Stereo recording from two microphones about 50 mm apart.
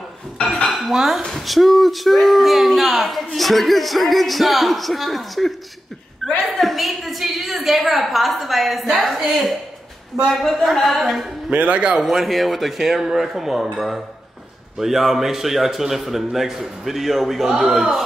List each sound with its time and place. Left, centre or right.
0.7 s dishes: centre
1.2 s a woman's voice: centre
11.5 s a man's voice: right
12.0 s a woman's voice: centre